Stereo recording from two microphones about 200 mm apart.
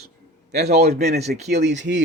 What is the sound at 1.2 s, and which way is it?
Speech, 35° right (ahead or behind).